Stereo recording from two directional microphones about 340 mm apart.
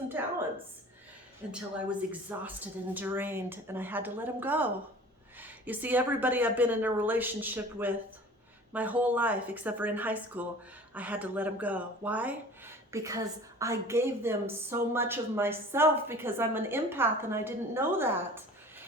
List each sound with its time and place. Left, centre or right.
0.2 s speech: centre
1.4 s speech: centre